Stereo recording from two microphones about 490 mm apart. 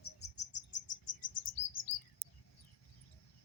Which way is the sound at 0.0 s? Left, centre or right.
Left.